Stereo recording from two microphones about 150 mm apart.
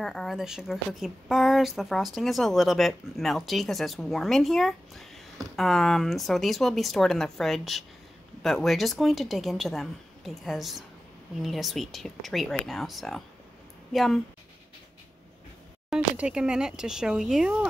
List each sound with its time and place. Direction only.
0.0 s a woman's voice: centre (ahead or behind)
15.9 s a woman's voice: 5° right (ahead or behind)